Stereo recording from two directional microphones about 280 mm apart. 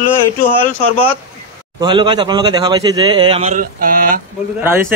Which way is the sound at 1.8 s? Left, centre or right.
Centre.